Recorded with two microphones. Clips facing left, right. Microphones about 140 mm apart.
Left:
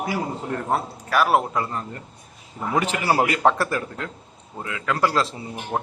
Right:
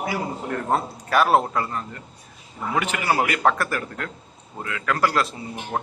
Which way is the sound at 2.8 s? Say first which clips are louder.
Left 2 dB; 30° left (ahead or behind).